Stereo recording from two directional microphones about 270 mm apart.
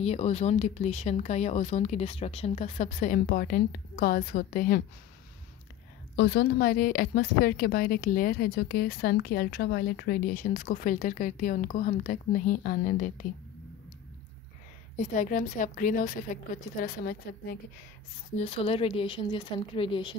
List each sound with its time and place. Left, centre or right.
0.0 s speech: left
6.1 s a woman's voice: left
15.0 s a woman's voice: left
18.3 s speech: left